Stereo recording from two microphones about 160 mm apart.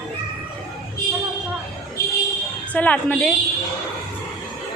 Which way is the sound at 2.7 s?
10° left (ahead or behind).